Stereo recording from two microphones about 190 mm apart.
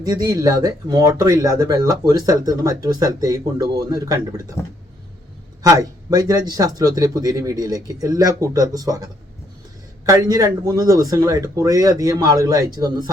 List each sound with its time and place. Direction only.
0.0 s a man's voice: 20° right (ahead or behind)
5.6 s a man's voice: 20° right (ahead or behind)
10.1 s a man's voice: 20° right (ahead or behind)